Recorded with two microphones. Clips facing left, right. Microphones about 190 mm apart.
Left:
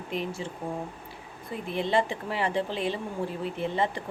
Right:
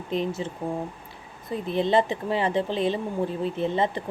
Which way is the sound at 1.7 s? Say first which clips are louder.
Right 4 dB; 25° right (ahead or behind).